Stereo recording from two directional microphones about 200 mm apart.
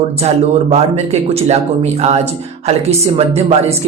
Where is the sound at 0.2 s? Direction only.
30° right (ahead or behind).